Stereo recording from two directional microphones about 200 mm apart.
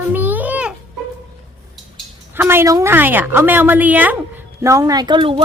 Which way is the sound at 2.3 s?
10° right (ahead or behind).